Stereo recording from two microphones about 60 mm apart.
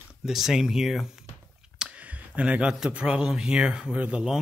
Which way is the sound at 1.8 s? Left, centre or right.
Right.